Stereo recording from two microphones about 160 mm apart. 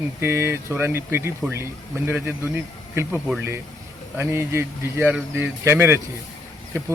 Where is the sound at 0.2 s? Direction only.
15° right (ahead or behind).